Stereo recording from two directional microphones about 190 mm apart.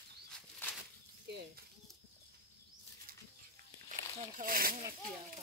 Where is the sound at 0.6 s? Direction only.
10° left (ahead or behind).